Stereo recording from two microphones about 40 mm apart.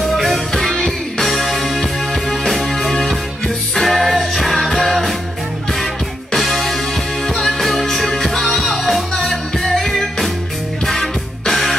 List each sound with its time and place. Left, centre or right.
0.0 s music: centre
6.3 s music: centre
7.2 s music: centre